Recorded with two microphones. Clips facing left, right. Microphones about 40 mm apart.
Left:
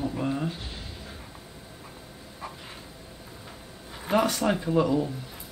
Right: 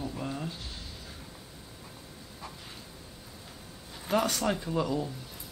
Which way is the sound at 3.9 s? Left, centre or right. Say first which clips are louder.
Left 4 dB; left.